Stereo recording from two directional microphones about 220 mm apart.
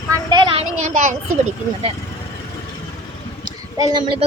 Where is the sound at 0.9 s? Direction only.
35° right (ahead or behind).